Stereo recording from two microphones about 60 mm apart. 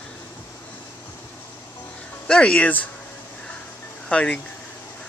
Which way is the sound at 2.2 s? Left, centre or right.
Centre.